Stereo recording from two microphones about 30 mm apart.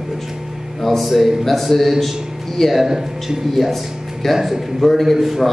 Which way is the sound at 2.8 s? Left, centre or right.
Centre.